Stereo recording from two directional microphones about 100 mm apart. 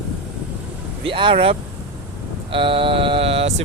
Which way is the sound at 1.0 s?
60° right (ahead or behind).